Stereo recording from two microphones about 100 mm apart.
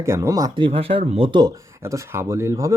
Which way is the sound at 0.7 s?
70° right (ahead or behind).